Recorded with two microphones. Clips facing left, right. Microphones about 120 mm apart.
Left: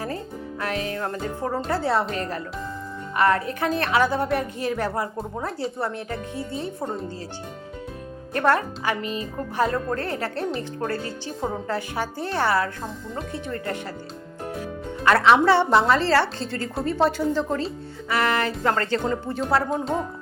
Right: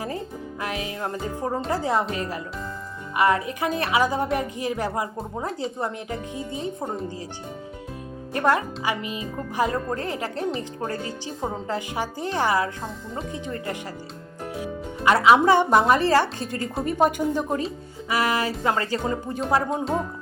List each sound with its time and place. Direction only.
0.6 s speech: 15° right (ahead or behind)
8.3 s speech: 15° right (ahead or behind)
19.7 s speech: centre (ahead or behind)